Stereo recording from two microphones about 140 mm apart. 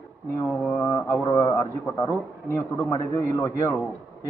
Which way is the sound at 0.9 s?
20° left (ahead or behind).